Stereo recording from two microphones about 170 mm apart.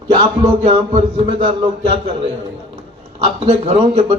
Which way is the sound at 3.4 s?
35° right (ahead or behind).